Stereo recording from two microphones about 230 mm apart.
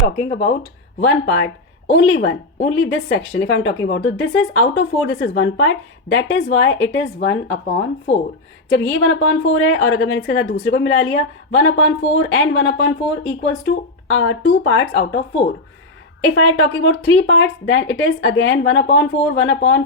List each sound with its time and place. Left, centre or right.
0.3 s speech: left